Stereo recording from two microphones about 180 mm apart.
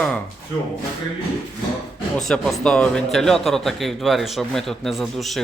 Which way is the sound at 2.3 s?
5° left (ahead or behind).